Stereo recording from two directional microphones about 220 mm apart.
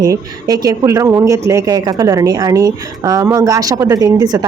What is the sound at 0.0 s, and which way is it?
Speech, 15° right (ahead or behind).